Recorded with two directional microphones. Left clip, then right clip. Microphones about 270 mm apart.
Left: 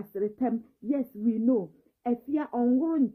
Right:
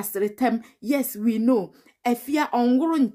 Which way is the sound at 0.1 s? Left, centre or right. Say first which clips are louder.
Right 6 dB; centre.